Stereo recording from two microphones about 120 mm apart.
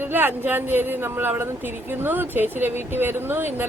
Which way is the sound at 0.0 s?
15° right (ahead or behind).